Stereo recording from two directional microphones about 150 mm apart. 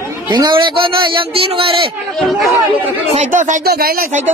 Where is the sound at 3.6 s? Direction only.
90° right.